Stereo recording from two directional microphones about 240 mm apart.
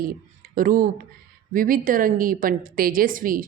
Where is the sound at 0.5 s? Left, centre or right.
Right.